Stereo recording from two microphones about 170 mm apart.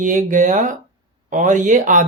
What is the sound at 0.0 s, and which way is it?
Speech, 50° right (ahead or behind).